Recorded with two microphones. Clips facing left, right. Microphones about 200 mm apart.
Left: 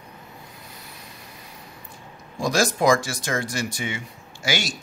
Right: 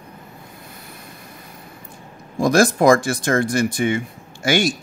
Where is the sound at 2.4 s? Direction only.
55° right (ahead or behind).